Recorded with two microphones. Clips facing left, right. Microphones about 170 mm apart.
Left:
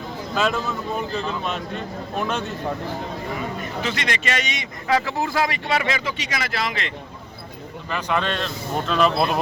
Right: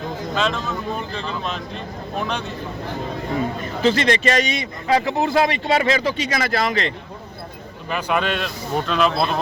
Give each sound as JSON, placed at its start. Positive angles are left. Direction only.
{"t": 0.3, "sound": "speech", "side_deg": 5}
{"t": 3.8, "sound": "speech", "side_deg": -35}
{"t": 7.9, "sound": "a man's voice", "side_deg": -10}
{"t": 8.9, "sound": "speech", "side_deg": 0}